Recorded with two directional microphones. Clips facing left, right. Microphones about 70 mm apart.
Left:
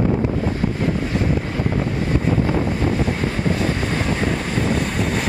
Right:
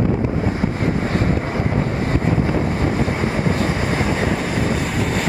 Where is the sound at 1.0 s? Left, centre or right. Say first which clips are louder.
Right 2 dB; right.